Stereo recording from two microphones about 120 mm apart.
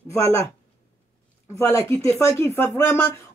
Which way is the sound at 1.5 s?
25° left (ahead or behind).